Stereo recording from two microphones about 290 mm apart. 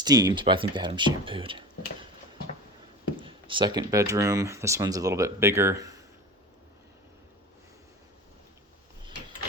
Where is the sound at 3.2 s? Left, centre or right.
Centre.